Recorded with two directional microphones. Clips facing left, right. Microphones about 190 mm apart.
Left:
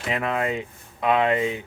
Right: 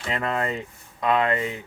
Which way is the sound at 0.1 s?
15° left (ahead or behind).